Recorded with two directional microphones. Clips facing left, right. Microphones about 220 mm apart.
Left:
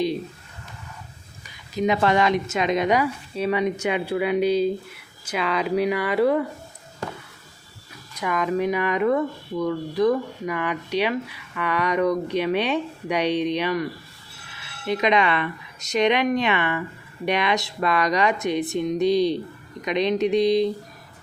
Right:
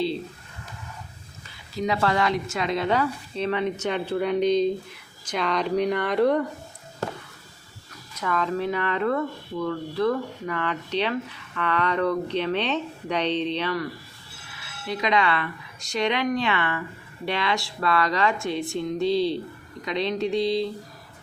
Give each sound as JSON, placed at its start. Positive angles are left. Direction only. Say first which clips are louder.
{"t": 1.5, "sound": "speech", "louder": "left 4 dB", "side_deg": 20}
{"t": 8.1, "sound": "speech", "louder": "left 2 dB", "side_deg": 15}
{"t": 14.8, "sound": "speech", "louder": "left 3 dB", "side_deg": 20}